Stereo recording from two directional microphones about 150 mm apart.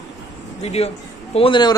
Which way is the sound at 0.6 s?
45° left (ahead or behind).